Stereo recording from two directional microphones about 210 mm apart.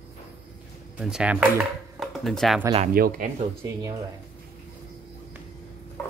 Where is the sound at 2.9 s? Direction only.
45° right (ahead or behind).